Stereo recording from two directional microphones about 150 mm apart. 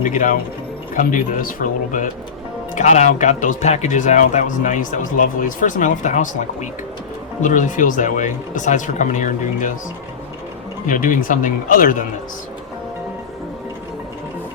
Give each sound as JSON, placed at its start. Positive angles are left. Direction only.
{"t": 0.0, "sound": "speech", "side_deg": 60}
{"t": 2.7, "sound": "speech", "side_deg": 50}
{"t": 10.8, "sound": "speech", "side_deg": 60}